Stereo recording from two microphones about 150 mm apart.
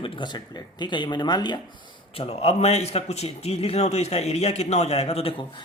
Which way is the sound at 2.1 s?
40° left (ahead or behind).